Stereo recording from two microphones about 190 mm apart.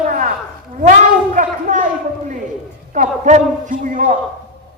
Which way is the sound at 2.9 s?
40° right (ahead or behind).